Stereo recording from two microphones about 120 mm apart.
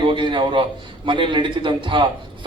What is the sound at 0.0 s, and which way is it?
A man's voice, 40° right (ahead or behind).